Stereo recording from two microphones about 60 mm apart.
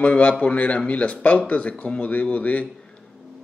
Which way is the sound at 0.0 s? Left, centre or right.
Left.